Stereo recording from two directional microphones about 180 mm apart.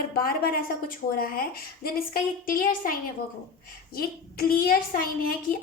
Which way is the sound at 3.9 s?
55° left (ahead or behind).